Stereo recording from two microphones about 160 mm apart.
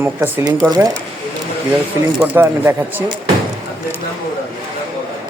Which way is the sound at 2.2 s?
10° right (ahead or behind).